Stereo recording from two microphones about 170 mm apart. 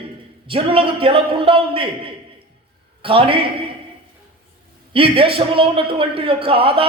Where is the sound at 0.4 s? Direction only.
30° right (ahead or behind).